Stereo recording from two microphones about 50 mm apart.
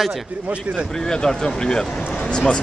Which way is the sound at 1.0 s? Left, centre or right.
Centre.